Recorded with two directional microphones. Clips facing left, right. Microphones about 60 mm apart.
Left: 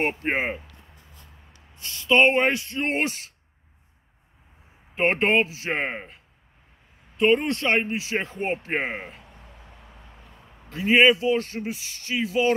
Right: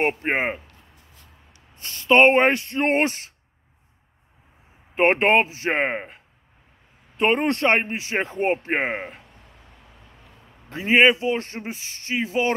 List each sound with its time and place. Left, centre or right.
0.0 s speech: right
1.8 s speech: right
4.9 s speech: right
9.2 s a sound: centre
10.7 s speech: right